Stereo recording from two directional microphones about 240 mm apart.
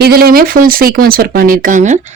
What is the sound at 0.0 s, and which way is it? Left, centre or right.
Speech, right.